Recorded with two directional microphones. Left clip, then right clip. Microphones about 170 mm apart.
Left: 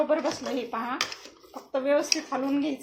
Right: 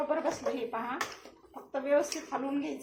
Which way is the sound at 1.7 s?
55° left (ahead or behind).